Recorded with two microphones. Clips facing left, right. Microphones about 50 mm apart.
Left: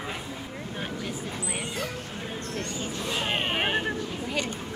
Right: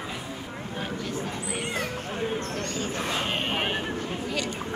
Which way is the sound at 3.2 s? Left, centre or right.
Centre.